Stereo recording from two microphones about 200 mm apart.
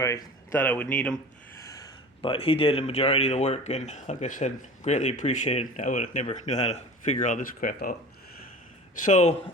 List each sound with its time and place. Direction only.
0.0 s speech: 15° left (ahead or behind)
1.6 s speech: 20° left (ahead or behind); by 7.9 s 45° left (ahead or behind)
9.0 s speech: 35° left (ahead or behind)